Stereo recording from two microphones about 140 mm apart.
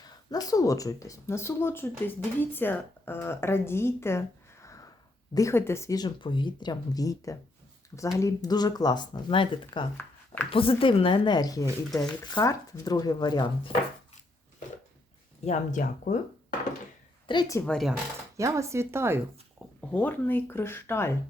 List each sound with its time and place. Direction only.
0.0 s speech: 25° left (ahead or behind)
4.6 s a sound: 20° left (ahead or behind)
5.3 s a woman's voice: 20° left (ahead or behind)
15.4 s speech: 65° left (ahead or behind)
17.3 s a woman's voice: 35° left (ahead or behind)
17.7 s speech: centre (ahead or behind)
18.3 s speech: 20° right (ahead or behind)
19.9 s speech: 10° left (ahead or behind)